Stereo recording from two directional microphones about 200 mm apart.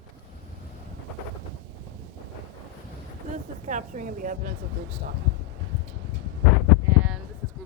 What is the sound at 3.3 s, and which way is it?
Speech, 40° right (ahead or behind).